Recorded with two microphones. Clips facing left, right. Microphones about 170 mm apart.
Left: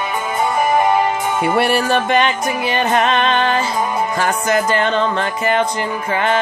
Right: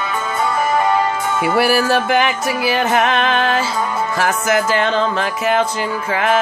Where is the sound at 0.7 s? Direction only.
15° left (ahead or behind).